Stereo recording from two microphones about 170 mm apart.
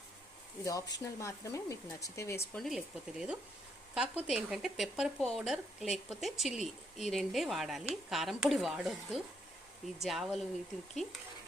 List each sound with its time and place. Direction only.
0.6 s speech: 20° left (ahead or behind)
2.6 s speech: centre (ahead or behind)